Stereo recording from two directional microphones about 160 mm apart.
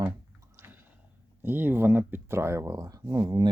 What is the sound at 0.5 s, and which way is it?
Chewing, 15° right (ahead or behind).